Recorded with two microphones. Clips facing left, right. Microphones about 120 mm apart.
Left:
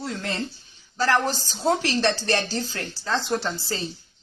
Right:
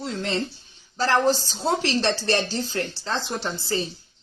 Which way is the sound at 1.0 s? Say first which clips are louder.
Right 2 dB; 25° right (ahead or behind).